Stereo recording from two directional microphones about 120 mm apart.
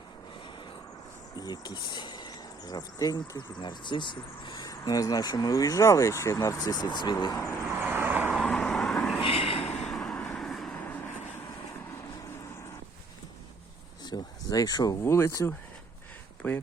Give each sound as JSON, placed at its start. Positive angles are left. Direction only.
{"t": 1.4, "sound": "speech", "side_deg": 35}
{"t": 7.3, "sound": "speech", "side_deg": 25}
{"t": 7.8, "sound": "vehicle", "side_deg": -15}
{"t": 8.3, "sound": "vehicle", "side_deg": 5}
{"t": 9.1, "sound": "vehicle", "side_deg": 55}
{"t": 9.7, "sound": "vehicle", "side_deg": 5}
{"t": 14.0, "sound": "a sound", "side_deg": 35}
{"t": 15.0, "sound": "speech", "side_deg": 20}